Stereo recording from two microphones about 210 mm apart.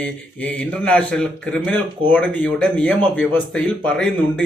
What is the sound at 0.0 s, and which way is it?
Speech, 5° left (ahead or behind).